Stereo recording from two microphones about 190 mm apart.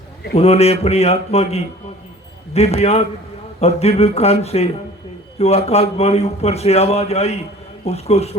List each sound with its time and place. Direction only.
0.3 s a man's voice: 35° left (ahead or behind)